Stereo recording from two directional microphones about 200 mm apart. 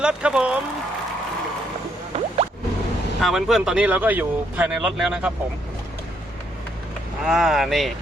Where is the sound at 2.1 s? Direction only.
30° right (ahead or behind).